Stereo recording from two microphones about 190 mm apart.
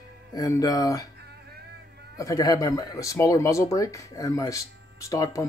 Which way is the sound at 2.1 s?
20° left (ahead or behind).